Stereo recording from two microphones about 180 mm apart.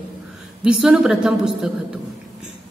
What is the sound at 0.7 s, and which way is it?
A woman's voice, 5° right (ahead or behind).